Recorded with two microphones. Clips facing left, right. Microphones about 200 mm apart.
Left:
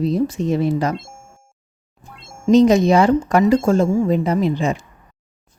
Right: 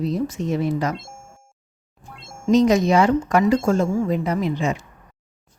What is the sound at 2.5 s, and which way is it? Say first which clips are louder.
Speech: left 4 dB; 30° left (ahead or behind).